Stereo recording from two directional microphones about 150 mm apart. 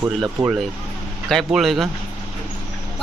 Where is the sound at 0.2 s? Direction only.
Centre (ahead or behind).